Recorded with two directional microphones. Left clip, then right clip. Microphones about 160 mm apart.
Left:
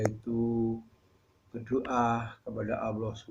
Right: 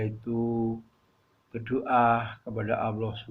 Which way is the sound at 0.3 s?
35° right (ahead or behind).